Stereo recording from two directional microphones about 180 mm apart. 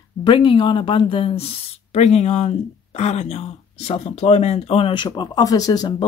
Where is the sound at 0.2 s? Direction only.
30° left (ahead or behind).